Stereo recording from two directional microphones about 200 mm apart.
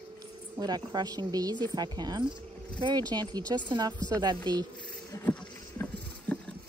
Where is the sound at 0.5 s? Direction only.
20° right (ahead or behind).